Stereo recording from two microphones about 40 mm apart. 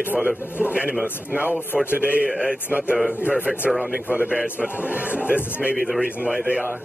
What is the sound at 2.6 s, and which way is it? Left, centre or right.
A man's voice, right.